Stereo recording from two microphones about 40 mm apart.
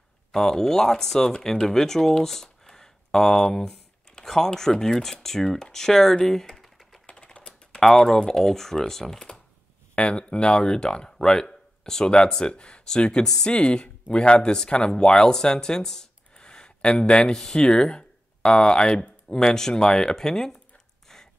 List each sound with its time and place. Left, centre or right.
0.3 s speech: centre
6.5 s typing: centre
7.1 s typewriter: left
7.8 s speech: centre
9.9 s speech: left
16.3 s a sound: left
17.4 s speech: centre